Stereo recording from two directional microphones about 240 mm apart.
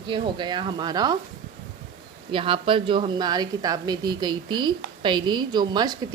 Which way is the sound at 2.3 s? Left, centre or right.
Right.